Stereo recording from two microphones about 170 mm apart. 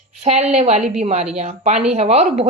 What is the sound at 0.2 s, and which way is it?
A woman's voice, 40° right (ahead or behind).